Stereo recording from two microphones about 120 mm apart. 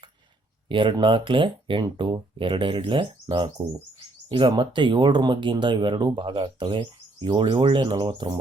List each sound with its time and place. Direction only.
0.7 s speech: 40° right (ahead or behind)